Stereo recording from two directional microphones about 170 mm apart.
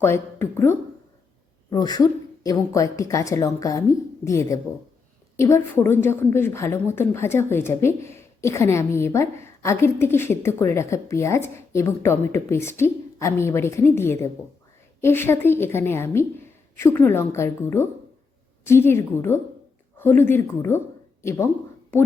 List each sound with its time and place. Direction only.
0.0 s a woman's voice: 15° left (ahead or behind)